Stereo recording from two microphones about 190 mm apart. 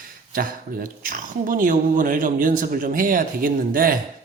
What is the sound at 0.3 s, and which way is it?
Speech, 45° right (ahead or behind).